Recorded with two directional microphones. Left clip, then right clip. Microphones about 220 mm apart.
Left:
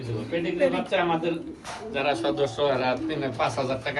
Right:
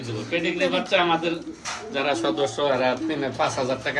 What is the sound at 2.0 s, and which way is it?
Speech, 35° right (ahead or behind).